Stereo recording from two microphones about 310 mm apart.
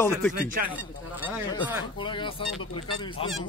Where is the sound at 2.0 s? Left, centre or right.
Centre.